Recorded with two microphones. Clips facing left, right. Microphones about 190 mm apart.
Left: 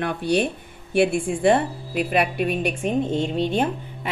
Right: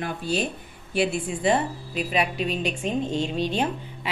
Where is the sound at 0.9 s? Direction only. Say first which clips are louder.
Left 5 dB; 50° left (ahead or behind).